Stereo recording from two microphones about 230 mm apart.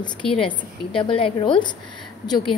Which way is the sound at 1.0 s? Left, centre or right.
Left.